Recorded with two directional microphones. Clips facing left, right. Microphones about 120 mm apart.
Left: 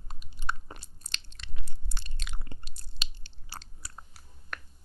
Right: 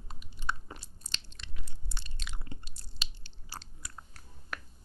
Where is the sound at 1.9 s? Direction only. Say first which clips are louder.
Left 1 dB; 55° left (ahead or behind).